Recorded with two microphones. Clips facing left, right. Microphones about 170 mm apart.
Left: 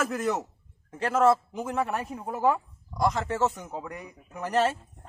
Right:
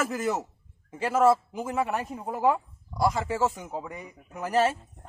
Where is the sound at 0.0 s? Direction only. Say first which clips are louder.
Even; 5° right (ahead or behind).